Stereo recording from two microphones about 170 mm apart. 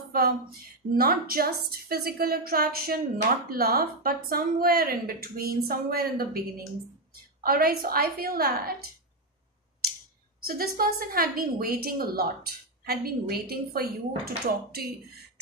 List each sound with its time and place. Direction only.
0.9 s a woman's voice: 60° right (ahead or behind)
7.4 s a woman's voice: 60° right (ahead or behind)
10.4 s a woman's voice: 60° right (ahead or behind)